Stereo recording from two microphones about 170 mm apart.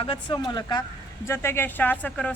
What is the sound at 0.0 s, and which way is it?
A woman's voice, 30° left (ahead or behind).